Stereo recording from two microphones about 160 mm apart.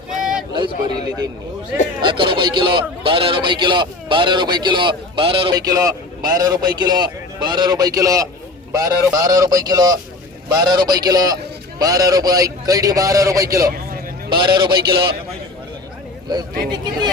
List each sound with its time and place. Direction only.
0.2 s a sound: 5° right (ahead or behind)
0.5 s a man's voice: 30° right (ahead or behind)
2.0 s a man's voice: 30° right (ahead or behind)
14.8 s a man's voice: 80° right
16.3 s a man's voice: 25° right (ahead or behind)